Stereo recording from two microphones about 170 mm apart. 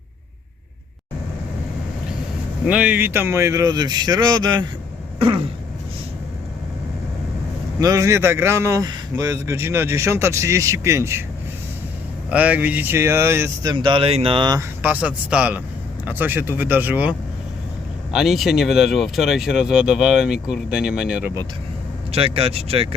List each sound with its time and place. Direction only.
2.6 s speech: 5° right (ahead or behind); by 4.6 s 25° right (ahead or behind)
7.8 s a man's voice: 20° right (ahead or behind)
12.3 s a man's voice: 10° right (ahead or behind); by 14.6 s 25° right (ahead or behind)
14.8 s a man's voice: 10° right (ahead or behind)
22.1 s speech: 35° right (ahead or behind)